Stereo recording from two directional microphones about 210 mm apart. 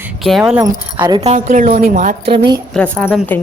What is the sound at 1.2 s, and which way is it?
Speech, 30° right (ahead or behind).